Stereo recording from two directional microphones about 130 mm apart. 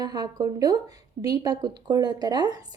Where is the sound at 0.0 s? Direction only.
30° right (ahead or behind).